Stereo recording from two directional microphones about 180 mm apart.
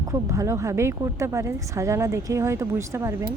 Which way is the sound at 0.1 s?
20° right (ahead or behind).